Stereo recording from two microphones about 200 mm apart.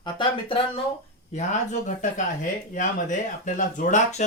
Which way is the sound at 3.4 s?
40° left (ahead or behind).